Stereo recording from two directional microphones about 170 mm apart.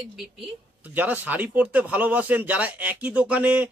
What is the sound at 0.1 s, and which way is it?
Speech, 5° right (ahead or behind).